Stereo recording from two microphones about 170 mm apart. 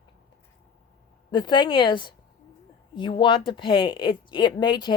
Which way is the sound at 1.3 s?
25° left (ahead or behind).